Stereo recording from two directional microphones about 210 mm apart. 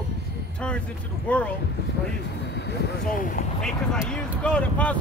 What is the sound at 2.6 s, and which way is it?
Speech, 50° left (ahead or behind).